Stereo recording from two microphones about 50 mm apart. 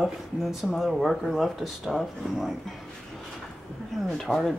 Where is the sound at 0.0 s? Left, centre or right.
Centre.